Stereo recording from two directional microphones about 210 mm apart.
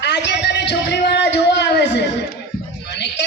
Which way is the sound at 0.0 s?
55° left (ahead or behind).